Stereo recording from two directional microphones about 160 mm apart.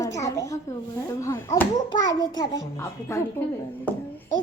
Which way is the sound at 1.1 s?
15° left (ahead or behind).